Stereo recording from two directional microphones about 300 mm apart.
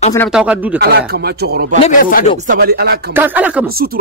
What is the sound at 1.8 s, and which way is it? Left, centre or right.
Speech, left.